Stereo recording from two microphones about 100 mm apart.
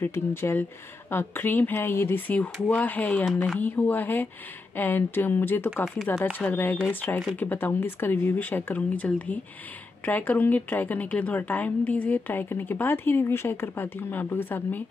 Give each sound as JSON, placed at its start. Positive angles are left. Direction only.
{"t": 0.0, "sound": "a woman's voice", "side_deg": 25}